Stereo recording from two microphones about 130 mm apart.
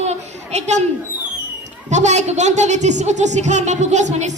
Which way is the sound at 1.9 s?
65° right (ahead or behind).